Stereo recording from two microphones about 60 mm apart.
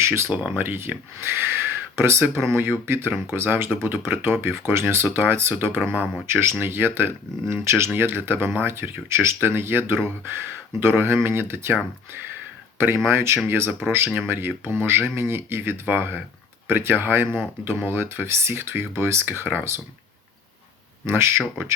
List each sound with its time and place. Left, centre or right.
0.0 s speech: right
5.9 s speech: centre
6.2 s speech: right
7.9 s speech: right
13.1 s speech: right
21.1 s speech: right